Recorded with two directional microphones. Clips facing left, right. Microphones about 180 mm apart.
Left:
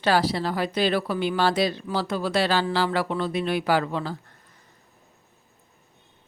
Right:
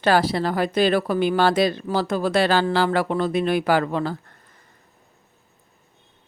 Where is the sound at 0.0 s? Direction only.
50° right (ahead or behind).